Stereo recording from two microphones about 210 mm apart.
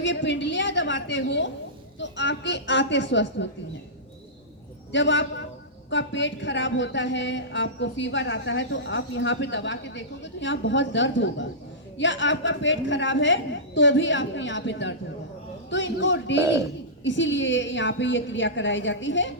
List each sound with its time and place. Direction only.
0.0 s a woman's voice: 60° left (ahead or behind)
4.9 s a woman's voice: 60° left (ahead or behind)